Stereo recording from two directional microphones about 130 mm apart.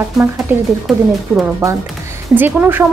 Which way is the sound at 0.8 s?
5° right (ahead or behind).